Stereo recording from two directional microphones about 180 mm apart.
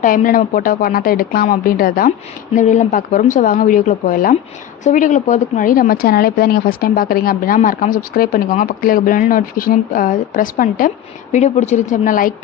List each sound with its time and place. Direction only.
0.0 s speech: 50° left (ahead or behind)